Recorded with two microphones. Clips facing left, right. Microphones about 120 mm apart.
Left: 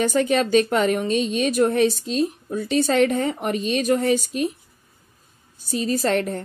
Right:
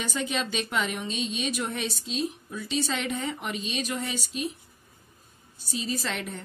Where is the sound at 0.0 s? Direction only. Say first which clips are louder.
Left 11 dB; 50° left (ahead or behind).